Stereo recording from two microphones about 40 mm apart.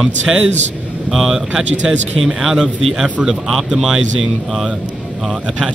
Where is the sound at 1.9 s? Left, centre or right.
Centre.